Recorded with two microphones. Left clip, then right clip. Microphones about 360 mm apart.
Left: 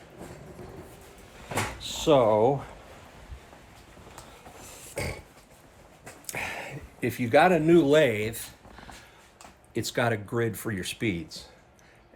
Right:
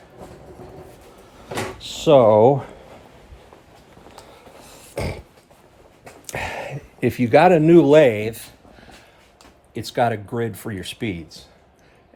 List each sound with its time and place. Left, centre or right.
1.8 s speech: right
6.2 s speech: right
9.7 s speech: centre